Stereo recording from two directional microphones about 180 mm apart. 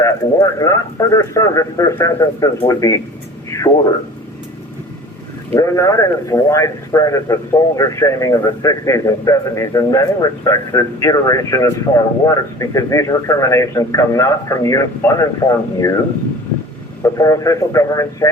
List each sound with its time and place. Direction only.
0.0 s speech: 15° left (ahead or behind)
3.5 s a sound: 15° left (ahead or behind)
5.5 s a man's voice: 15° left (ahead or behind)
17.0 s speech: 20° left (ahead or behind)